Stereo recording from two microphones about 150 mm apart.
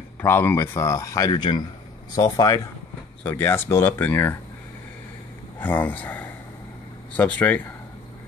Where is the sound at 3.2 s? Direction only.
10° left (ahead or behind).